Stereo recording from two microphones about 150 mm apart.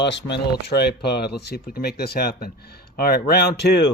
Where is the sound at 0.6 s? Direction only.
90° left.